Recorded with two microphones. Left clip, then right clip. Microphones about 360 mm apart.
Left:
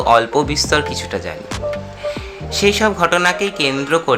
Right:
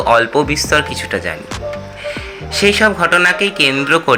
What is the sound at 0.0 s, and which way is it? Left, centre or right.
Speech, centre.